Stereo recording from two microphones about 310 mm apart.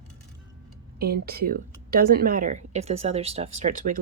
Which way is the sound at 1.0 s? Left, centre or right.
Right.